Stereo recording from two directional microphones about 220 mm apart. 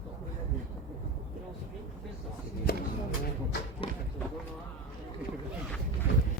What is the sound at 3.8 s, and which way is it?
Run, 25° left (ahead or behind).